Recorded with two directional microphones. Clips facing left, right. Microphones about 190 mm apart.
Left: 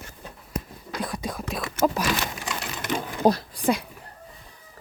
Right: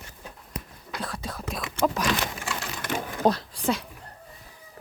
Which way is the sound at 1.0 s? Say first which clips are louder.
Left 4 dB; 15° left (ahead or behind).